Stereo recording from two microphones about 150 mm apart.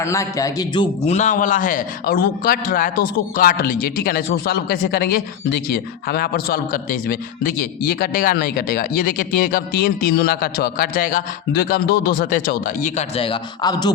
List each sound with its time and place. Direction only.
0.0 s a man's voice: 20° left (ahead or behind)
1.0 s a man's voice: 50° left (ahead or behind)
13.1 s a man's voice: 35° left (ahead or behind)